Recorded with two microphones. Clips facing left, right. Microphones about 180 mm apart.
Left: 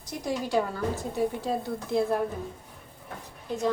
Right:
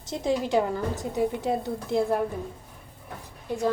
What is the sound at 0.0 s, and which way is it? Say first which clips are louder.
A woman's voice: right 5 dB; 25° right (ahead or behind).